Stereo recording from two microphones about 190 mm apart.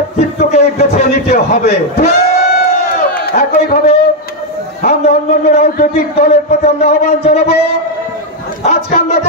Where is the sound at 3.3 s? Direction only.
55° left (ahead or behind).